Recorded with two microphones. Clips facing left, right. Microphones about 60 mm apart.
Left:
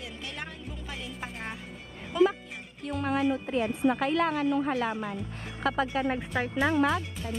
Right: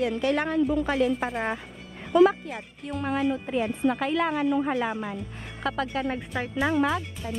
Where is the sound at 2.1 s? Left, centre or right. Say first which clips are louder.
Right 6 dB; right.